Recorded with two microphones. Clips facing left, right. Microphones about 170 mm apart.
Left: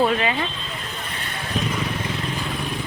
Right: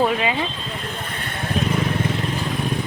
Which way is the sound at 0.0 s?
10° right (ahead or behind).